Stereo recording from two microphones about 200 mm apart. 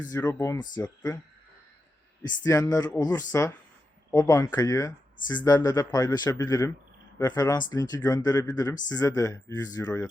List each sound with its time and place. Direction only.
0.0 s speech: 15° left (ahead or behind)
2.2 s speech: 15° left (ahead or behind)